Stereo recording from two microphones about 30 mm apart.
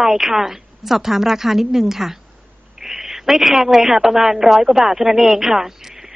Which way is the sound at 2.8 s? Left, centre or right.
Centre.